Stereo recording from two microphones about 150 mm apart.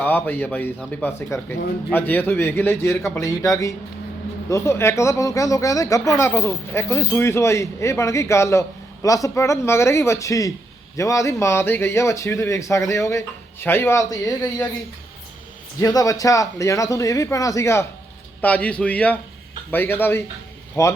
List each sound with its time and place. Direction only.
0.0 s speech: 10° left (ahead or behind)
15.8 s speech: 25° left (ahead or behind)